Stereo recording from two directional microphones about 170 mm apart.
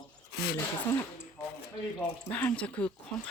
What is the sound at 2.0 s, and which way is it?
Speech, 10° left (ahead or behind).